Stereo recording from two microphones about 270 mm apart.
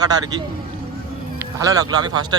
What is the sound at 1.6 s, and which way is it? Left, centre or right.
Speech, centre.